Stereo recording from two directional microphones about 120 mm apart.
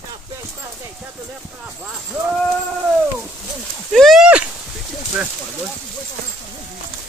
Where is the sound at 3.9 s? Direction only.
Centre (ahead or behind).